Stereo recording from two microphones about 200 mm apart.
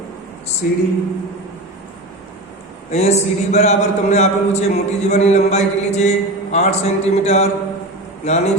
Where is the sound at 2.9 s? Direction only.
35° left (ahead or behind).